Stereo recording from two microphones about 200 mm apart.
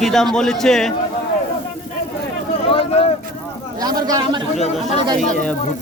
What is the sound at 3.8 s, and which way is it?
Speech, 20° right (ahead or behind).